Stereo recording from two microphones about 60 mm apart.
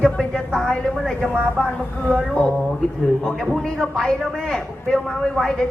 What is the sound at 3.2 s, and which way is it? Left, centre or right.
A man's voice, centre.